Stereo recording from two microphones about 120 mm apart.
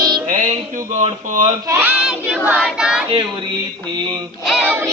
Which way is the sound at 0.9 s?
80° right.